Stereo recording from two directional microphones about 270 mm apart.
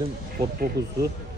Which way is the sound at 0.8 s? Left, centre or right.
Right.